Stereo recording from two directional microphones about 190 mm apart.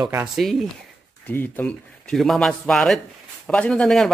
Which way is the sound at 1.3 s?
10° left (ahead or behind).